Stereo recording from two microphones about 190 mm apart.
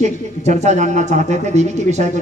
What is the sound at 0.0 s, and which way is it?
Speech, 40° right (ahead or behind).